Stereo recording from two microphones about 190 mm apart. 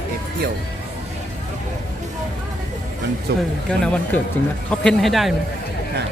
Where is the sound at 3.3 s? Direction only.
60° right (ahead or behind).